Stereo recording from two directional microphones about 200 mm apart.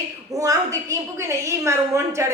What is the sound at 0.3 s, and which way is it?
A woman's voice, 15° right (ahead or behind).